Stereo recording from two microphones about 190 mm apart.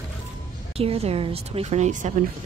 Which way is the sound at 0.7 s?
30° right (ahead or behind).